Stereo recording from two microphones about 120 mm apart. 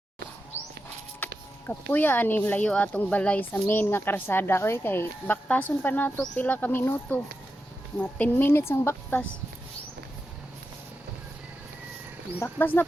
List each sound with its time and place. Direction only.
0.5 s music: 20° left (ahead or behind)
1.2 s speech: 15° left (ahead or behind)
12.4 s speech: 15° left (ahead or behind)